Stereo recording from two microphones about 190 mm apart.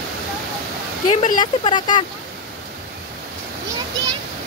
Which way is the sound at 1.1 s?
35° left (ahead or behind).